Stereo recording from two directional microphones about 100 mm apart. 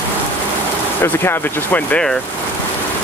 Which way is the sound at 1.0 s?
20° left (ahead or behind).